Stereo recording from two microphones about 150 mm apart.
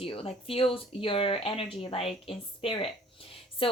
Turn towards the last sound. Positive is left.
turn(degrees=35)  # may be behind; listen again after turning